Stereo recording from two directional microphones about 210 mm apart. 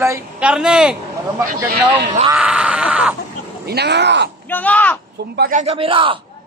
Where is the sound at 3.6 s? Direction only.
50° right (ahead or behind).